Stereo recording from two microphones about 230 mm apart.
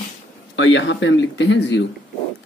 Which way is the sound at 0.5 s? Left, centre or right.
Left.